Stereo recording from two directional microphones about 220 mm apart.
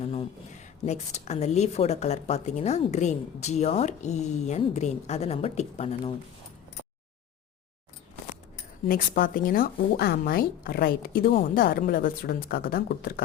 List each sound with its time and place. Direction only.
0.0 s speech: 25° left (ahead or behind)
8.9 s speech: 40° left (ahead or behind)